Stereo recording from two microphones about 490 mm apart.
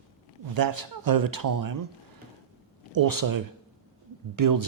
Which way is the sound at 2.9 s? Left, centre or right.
Right.